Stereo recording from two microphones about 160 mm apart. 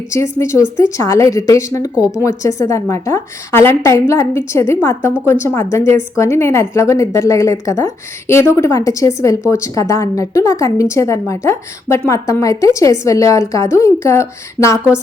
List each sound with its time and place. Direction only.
0.1 s a woman's voice: 20° left (ahead or behind)